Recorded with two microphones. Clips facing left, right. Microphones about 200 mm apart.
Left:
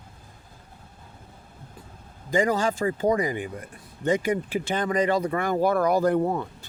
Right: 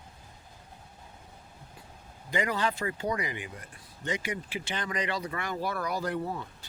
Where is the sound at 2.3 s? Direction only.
45° left (ahead or behind).